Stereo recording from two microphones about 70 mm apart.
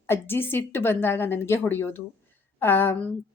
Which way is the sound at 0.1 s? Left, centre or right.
Left.